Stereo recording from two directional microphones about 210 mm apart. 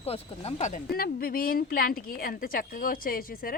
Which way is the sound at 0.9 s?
45° left (ahead or behind).